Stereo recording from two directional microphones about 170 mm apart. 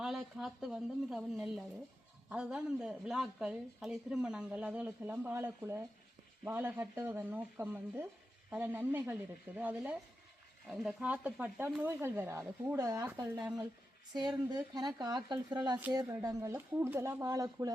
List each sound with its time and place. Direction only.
0.0 s a woman's voice: centre (ahead or behind)
14.1 s speech: 25° right (ahead or behind)